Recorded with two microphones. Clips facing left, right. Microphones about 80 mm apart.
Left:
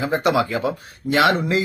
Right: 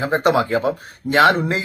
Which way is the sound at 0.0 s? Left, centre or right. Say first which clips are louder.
Right 2 dB; right.